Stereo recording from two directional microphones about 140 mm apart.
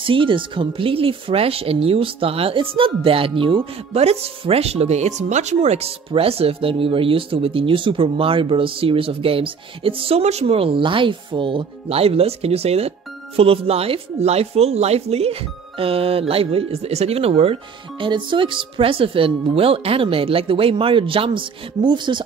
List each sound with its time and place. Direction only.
0.0 s speech: 40° right (ahead or behind)